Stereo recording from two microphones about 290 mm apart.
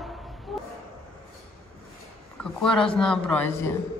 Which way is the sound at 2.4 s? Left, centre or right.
Centre.